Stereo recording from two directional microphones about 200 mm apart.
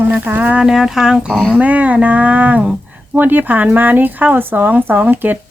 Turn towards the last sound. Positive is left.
turn(degrees=-10)  # may be behind; listen again after turning